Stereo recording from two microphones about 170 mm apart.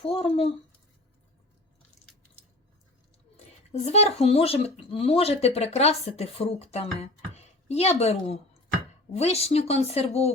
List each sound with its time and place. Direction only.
0.0 s speech: 35° left (ahead or behind)
3.3 s speech: 40° left (ahead or behind)